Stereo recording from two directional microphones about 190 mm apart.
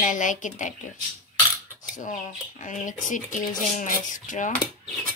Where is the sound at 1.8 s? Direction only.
45° left (ahead or behind).